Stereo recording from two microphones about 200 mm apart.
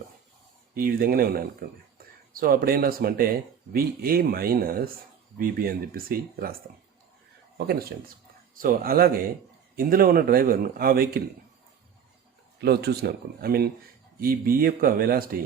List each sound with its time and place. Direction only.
0.7 s speech: 50° right (ahead or behind)
7.7 s speech: 50° right (ahead or behind)
12.5 s speech: 55° right (ahead or behind)